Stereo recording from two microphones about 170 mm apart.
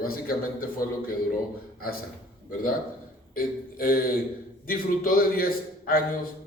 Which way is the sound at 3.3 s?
60° left (ahead or behind).